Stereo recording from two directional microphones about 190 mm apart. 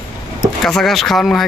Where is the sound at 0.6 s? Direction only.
Centre (ahead or behind).